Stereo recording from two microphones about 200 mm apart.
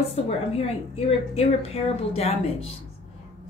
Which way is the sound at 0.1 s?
30° left (ahead or behind).